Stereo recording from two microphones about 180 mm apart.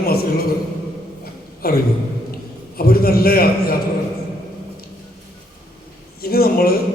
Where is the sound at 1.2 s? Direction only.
60° left (ahead or behind).